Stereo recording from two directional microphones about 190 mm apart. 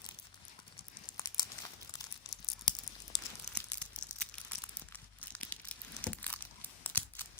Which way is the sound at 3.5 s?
5° left (ahead or behind).